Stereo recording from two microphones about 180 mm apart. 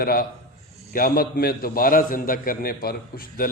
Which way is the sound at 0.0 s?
55° left (ahead or behind).